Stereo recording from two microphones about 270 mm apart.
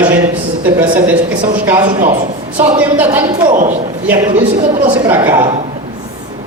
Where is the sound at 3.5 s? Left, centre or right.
Right.